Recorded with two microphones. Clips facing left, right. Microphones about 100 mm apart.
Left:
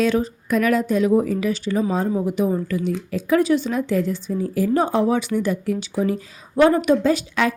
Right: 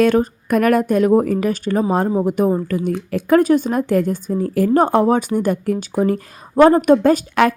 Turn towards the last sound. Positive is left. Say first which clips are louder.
# right 5 dB
turn(degrees=-55)  # may be behind; listen again after turning